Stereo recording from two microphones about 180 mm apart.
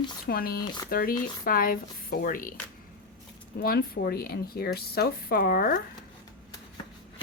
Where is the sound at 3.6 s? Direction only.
60° left (ahead or behind).